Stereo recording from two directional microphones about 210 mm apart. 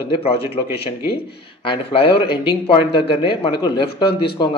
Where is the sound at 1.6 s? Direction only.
25° left (ahead or behind).